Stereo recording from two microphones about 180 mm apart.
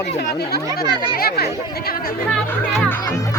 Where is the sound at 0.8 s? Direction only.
25° right (ahead or behind).